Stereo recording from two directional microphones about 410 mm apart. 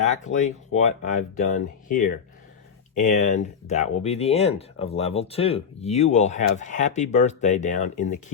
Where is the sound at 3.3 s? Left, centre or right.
Centre.